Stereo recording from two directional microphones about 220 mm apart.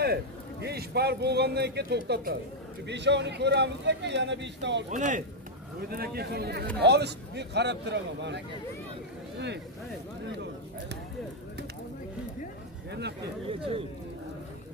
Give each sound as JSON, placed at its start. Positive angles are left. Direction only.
{"t": 0.0, "sound": "a man's voice", "side_deg": -45}
{"t": 4.9, "sound": "a man's voice", "side_deg": -35}
{"t": 10.2, "sound": "a sound", "side_deg": -50}
{"t": 12.9, "sound": "a man's voice", "side_deg": -50}